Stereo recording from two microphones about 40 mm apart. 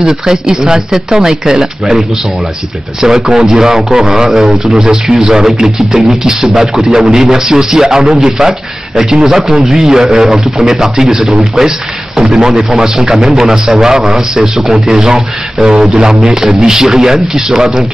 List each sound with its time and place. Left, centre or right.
0.0 s a man's voice: centre